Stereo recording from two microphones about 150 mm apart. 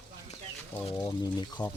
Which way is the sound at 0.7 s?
20° left (ahead or behind).